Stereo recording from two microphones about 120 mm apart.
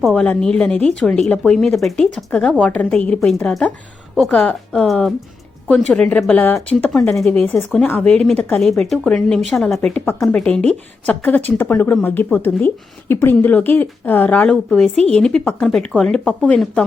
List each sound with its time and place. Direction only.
0.1 s speech: 10° left (ahead or behind)